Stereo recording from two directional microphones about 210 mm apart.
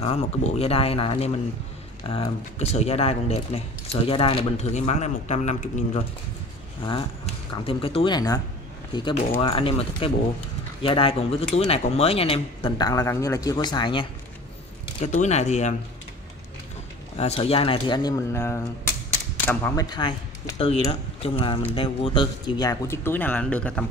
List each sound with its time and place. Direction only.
0.0 s speech: 30° left (ahead or behind)
15.0 s speech: 35° left (ahead or behind)
17.2 s speech: 30° left (ahead or behind); by 23.9 s 5° left (ahead or behind)